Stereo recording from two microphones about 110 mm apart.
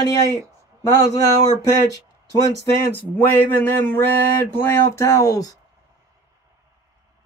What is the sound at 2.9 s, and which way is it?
Speech, 15° left (ahead or behind).